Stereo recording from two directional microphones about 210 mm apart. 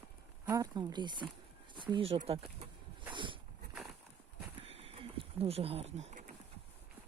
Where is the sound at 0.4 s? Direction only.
15° right (ahead or behind).